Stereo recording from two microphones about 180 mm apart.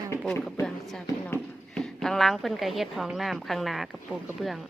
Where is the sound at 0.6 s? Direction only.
Centre (ahead or behind).